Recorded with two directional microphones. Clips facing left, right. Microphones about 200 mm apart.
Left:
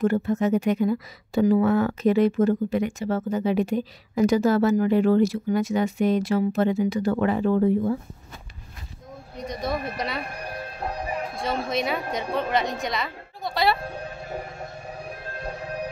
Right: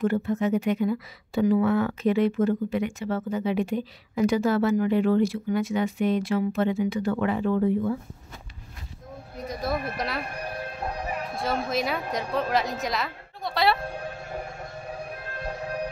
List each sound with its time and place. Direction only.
0.0 s speech: 45° left (ahead or behind)
9.4 s a woman's voice: centre (ahead or behind)
11.3 s a woman's voice: centre (ahead or behind)